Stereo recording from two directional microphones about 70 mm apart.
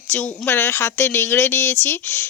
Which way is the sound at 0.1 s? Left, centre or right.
Left.